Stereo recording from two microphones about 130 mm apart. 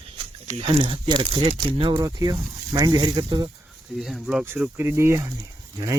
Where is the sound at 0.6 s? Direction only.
40° right (ahead or behind).